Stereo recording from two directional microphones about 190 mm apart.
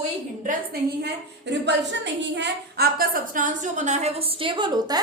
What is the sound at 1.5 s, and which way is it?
A woman's voice, 65° right (ahead or behind).